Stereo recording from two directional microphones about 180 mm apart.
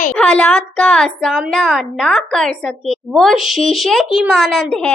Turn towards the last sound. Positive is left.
turn(degrees=0)  # may be behind; listen again after turning